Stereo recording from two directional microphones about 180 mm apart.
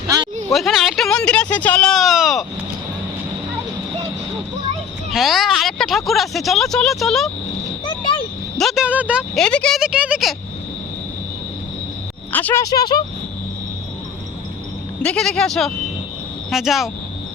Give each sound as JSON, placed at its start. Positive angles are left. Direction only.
{"t": 0.5, "sound": "speech", "side_deg": 0}
{"t": 5.1, "sound": "speech", "side_deg": 0}
{"t": 7.9, "sound": "a sound", "side_deg": 25}
{"t": 8.5, "sound": "speech", "side_deg": 0}
{"t": 9.4, "sound": "speech", "side_deg": 5}
{"t": 12.3, "sound": "speech", "side_deg": 10}
{"t": 15.0, "sound": "speech", "side_deg": 5}